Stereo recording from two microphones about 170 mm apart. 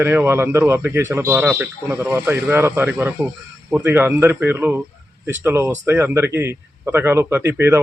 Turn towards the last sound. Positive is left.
turn(degrees=-15)  # may be behind; listen again after turning